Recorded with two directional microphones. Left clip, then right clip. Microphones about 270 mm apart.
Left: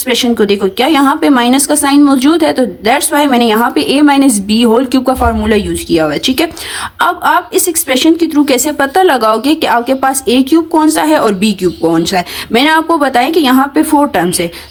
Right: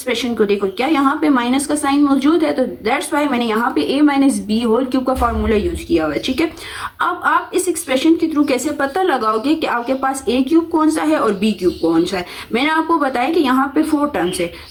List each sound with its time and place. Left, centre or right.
0.1 s speech: left
7.5 s speech: left
12.5 s speech: left